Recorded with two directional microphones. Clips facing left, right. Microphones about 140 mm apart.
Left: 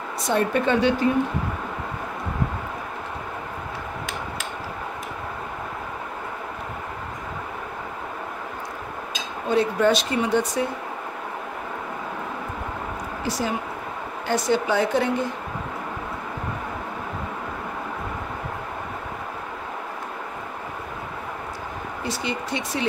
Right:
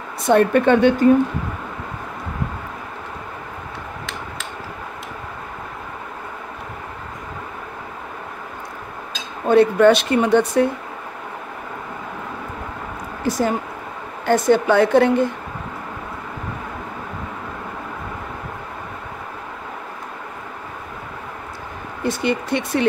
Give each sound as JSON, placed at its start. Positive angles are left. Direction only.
{"t": 0.2, "sound": "a woman's voice", "side_deg": -60}
{"t": 9.5, "sound": "a woman's voice", "side_deg": -65}
{"t": 13.3, "sound": "a woman's voice", "side_deg": -50}
{"t": 22.0, "sound": "a woman's voice", "side_deg": -55}